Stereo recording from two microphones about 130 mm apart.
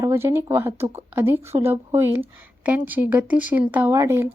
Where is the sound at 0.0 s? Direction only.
20° right (ahead or behind).